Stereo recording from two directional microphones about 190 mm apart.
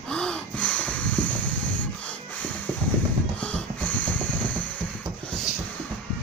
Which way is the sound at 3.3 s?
5° left (ahead or behind).